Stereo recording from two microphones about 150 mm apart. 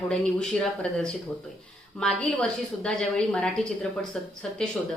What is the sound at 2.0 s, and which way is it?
A woman's voice, 5° left (ahead or behind).